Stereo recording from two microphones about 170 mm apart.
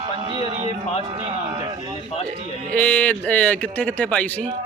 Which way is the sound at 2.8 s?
10° left (ahead or behind).